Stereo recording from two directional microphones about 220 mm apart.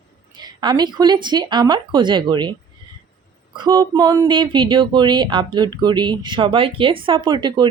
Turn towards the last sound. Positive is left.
turn(degrees=-20)  # may be behind; listen again after turning